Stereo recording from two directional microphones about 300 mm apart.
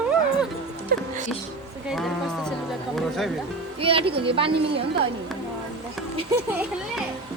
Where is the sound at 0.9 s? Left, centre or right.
Right.